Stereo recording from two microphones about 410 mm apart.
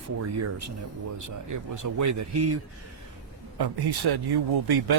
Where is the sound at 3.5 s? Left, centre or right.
Right.